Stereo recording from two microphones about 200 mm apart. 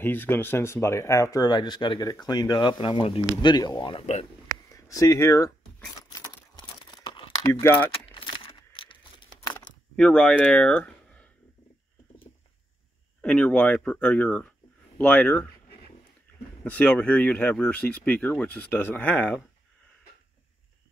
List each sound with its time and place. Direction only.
0.0 s speech: 10° left (ahead or behind); by 4.3 s 30° left (ahead or behind)
4.5 s a sound: 15° left (ahead or behind)
7.4 s speech: 10° left (ahead or behind)
7.9 s keys jangling: 25° left (ahead or behind)
9.9 s speech: 5° left (ahead or behind)
13.2 s speech: 5° left (ahead or behind)
16.6 s speech: 10° left (ahead or behind)